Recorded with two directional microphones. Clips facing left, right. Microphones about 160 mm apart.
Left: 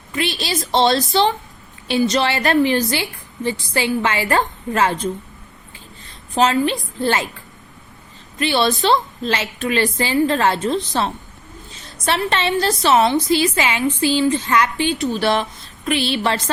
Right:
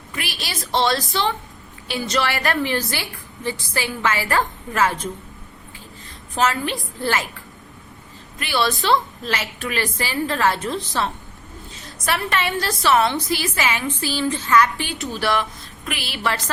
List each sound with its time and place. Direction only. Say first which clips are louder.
0.2 s a woman's voice: left 8 dB; 25° left (ahead or behind)
6.3 s a woman's voice: left 5 dB; 25° left (ahead or behind)
8.4 s a woman's voice: left 5 dB; 25° left (ahead or behind)